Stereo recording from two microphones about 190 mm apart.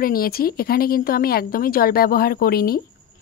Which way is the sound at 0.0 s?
50° left (ahead or behind).